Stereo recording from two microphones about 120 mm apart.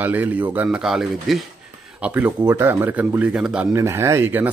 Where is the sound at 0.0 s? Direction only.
15° right (ahead or behind).